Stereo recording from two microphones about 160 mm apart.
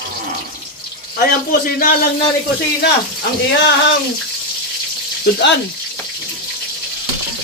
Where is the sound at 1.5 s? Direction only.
60° left (ahead or behind).